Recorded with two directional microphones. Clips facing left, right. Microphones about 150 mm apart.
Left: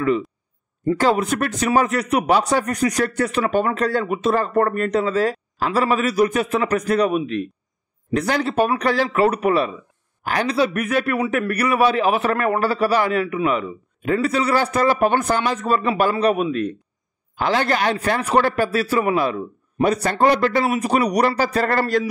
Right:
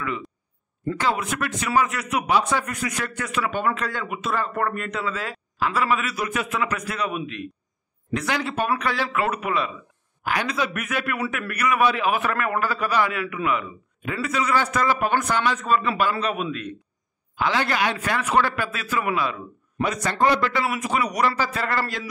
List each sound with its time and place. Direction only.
0.9 s a man's voice: 40° left (ahead or behind)